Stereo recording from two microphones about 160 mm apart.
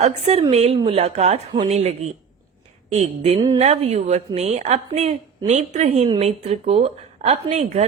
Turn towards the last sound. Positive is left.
turn(degrees=-45)  # may be behind; listen again after turning